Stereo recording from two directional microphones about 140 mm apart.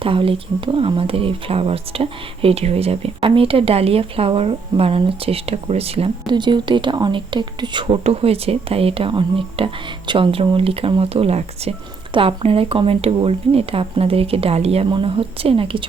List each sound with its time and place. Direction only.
0.0 s speech: 40° right (ahead or behind)